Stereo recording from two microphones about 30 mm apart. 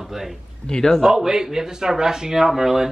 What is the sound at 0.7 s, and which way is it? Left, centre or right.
Speech, left.